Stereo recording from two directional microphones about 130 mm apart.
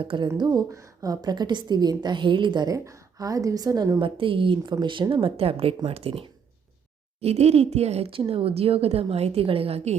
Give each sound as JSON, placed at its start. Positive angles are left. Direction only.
{"t": 0.0, "sound": "a woman's voice", "side_deg": -40}
{"t": 0.3, "sound": "a woman's voice", "side_deg": -30}
{"t": 4.0, "sound": "a woman's voice", "side_deg": -40}